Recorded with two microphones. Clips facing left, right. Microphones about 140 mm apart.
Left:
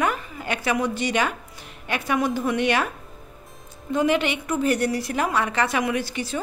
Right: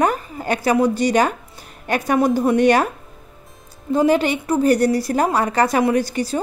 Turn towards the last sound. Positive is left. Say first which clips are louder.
# right 7 dB
turn(degrees=-40)  # may be behind; listen again after turning